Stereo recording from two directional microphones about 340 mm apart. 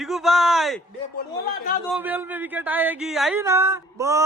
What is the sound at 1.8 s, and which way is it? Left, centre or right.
Speech, centre.